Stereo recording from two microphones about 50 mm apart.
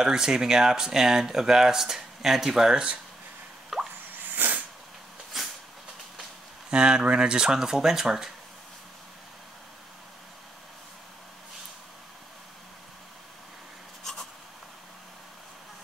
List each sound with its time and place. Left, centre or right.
0.0 s speech: centre
3.7 s drip: centre
4.3 s a sound: right
6.7 s speech: centre